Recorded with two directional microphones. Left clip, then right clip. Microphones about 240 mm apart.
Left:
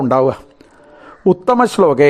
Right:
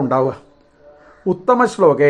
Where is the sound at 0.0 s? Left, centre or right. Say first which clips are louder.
Left 4 dB; left.